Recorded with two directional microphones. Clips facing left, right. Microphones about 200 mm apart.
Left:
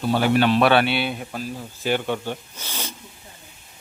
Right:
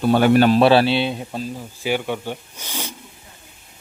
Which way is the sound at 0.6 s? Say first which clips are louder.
Right 4 dB; 30° right (ahead or behind).